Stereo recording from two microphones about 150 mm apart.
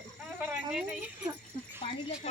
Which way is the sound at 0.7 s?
5° right (ahead or behind).